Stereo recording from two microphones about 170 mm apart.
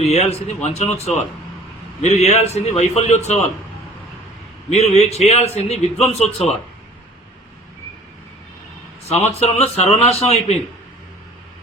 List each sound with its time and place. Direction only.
0.0 s a man's voice: 40° left (ahead or behind)
4.7 s a man's voice: 40° left (ahead or behind)
9.4 s a man's voice: 40° left (ahead or behind)